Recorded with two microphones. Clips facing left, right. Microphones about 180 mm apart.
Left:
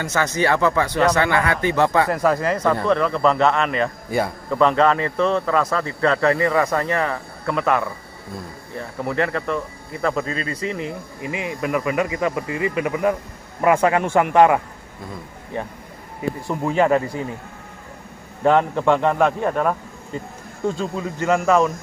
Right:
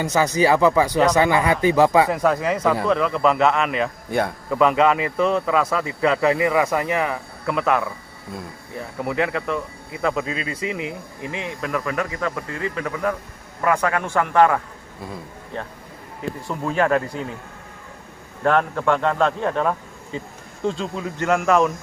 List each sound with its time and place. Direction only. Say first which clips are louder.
0.0 s a man's voice: right 2 dB; 15° right (ahead or behind)
2.0 s a man's voice: left 1 dB; centre (ahead or behind)
11.3 s a man's voice: left 3 dB; 5° left (ahead or behind)
18.4 s speech: left 3 dB; 15° left (ahead or behind); by 21.7 s centre (ahead or behind)